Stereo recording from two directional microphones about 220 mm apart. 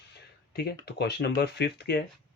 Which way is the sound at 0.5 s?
50° left (ahead or behind).